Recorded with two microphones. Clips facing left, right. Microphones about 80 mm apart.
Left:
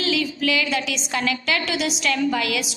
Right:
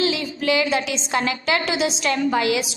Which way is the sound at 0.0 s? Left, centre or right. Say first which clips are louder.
Right 1 dB; right.